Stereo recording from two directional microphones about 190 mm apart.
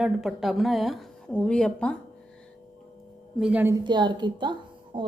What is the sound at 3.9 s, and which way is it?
A woman's voice, 25° right (ahead or behind).